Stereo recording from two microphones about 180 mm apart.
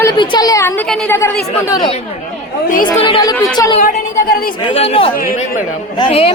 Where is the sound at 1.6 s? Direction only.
20° left (ahead or behind).